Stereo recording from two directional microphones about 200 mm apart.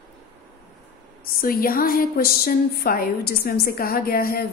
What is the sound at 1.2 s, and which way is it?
A woman's voice, 45° left (ahead or behind).